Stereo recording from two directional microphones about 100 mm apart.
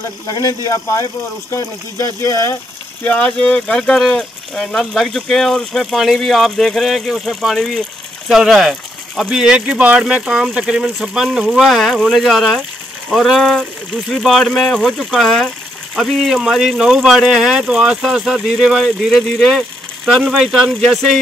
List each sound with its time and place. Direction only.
0.3 s speech: 35° left (ahead or behind)
3.0 s speech: 15° left (ahead or behind)